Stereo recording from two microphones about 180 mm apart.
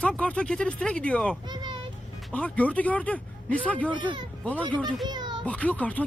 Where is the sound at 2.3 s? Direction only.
5° left (ahead or behind).